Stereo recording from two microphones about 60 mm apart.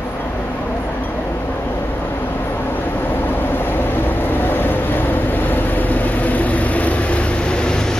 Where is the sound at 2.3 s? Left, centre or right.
Left.